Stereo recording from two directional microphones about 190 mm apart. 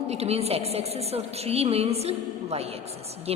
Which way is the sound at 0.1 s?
35° right (ahead or behind).